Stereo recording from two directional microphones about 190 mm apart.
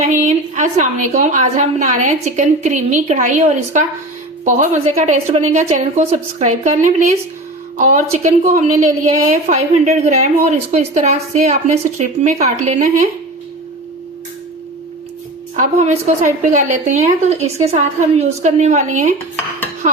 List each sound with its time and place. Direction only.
0.0 s a woman's voice: 40° right (ahead or behind)
15.5 s a woman's voice: 40° right (ahead or behind)